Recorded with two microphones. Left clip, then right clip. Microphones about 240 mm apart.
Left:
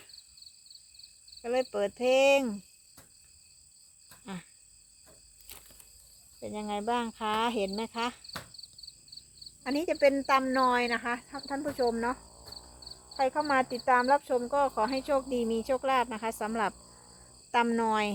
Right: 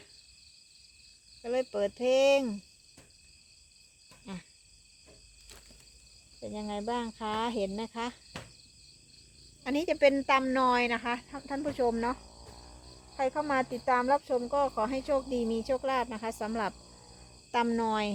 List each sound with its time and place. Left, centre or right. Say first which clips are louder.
1.4 s speech: left 1 dB; centre
4.3 s speech: left 2 dB; left
6.4 s speech: left 3 dB; left
9.6 s speech: even; centre
13.1 s speech: left 2 dB; left